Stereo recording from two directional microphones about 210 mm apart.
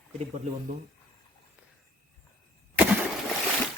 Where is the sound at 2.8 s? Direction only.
5° right (ahead or behind).